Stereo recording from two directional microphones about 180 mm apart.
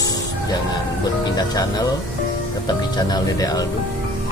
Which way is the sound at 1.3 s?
20° left (ahead or behind).